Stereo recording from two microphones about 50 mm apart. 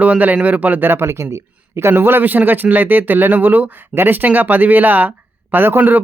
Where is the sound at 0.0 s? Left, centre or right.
Right.